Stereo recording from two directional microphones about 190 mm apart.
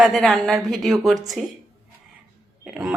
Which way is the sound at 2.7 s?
5° right (ahead or behind).